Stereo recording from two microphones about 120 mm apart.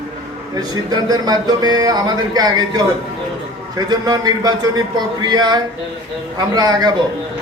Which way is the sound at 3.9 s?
35° right (ahead or behind).